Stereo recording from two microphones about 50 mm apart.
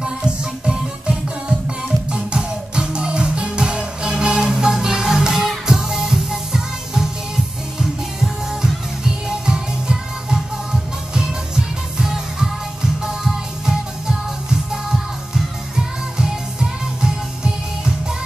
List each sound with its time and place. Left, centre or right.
0.0 s music: centre
9.0 s music: centre